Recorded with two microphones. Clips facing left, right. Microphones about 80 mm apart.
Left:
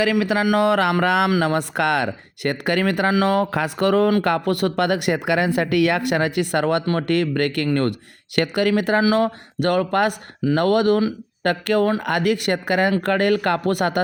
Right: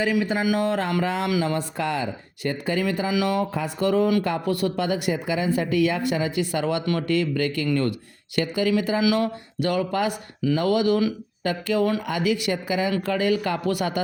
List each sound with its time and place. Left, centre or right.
0.0 s speech: left
0.4 s speech: left
3.1 s speech: left
3.5 s speech: left
9.0 s speech: left